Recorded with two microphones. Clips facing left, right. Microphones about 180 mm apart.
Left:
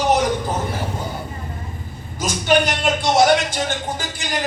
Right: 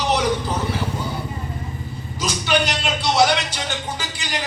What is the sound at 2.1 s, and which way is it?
A man's voice, 50° left (ahead or behind).